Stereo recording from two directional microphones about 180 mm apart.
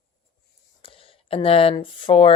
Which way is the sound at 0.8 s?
30° left (ahead or behind).